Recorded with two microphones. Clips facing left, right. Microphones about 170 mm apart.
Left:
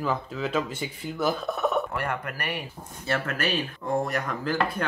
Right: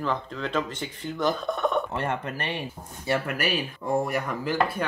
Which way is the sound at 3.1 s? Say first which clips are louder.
Right 1 dB; 15° right (ahead or behind).